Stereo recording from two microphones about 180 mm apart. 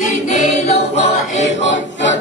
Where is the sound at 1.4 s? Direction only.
90° left.